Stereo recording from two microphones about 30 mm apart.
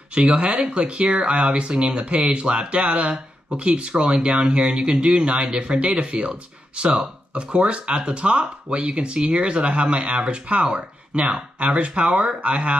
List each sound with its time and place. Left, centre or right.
0.1 s speech: right
3.1 s speech: right